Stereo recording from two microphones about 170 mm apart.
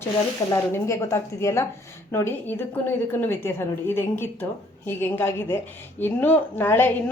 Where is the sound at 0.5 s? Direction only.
15° left (ahead or behind).